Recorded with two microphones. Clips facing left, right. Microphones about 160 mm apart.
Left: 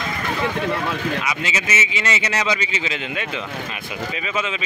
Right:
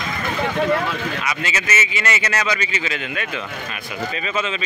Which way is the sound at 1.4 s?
20° left (ahead or behind).